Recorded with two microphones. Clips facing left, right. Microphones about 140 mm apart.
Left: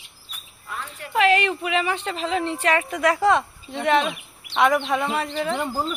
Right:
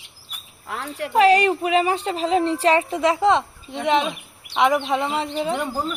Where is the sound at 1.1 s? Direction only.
40° right (ahead or behind); by 5.5 s 20° right (ahead or behind).